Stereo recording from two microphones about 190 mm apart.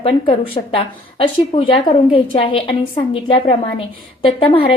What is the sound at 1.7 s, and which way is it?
A woman's voice, 25° left (ahead or behind).